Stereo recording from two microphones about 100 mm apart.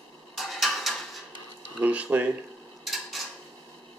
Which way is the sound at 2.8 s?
Centre (ahead or behind).